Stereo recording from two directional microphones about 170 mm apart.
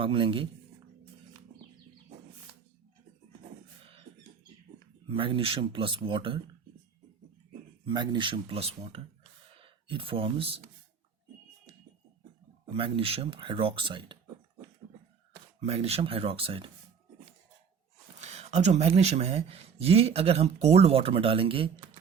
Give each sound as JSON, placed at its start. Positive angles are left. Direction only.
{"t": 0.0, "sound": "speech", "side_deg": -30}
{"t": 5.0, "sound": "speech", "side_deg": -30}
{"t": 7.9, "sound": "speech", "side_deg": -25}
{"t": 12.6, "sound": "speech", "side_deg": -30}
{"t": 15.6, "sound": "speech", "side_deg": -35}
{"t": 18.2, "sound": "speech", "side_deg": -40}